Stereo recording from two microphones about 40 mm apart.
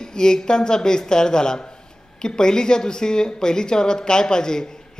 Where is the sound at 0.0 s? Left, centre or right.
Centre.